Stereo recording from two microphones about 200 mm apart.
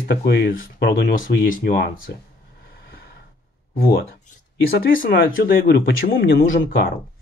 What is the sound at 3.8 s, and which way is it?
Speech, 50° left (ahead or behind).